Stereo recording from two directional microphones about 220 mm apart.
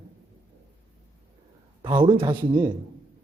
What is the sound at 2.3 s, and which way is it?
Speech, 10° right (ahead or behind).